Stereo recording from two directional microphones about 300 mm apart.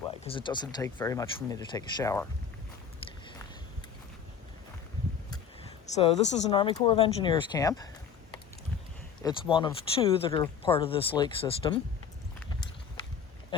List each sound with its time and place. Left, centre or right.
0.3 s speech: centre
3.0 s a sound: centre
5.8 s speech: left
9.2 s speech: centre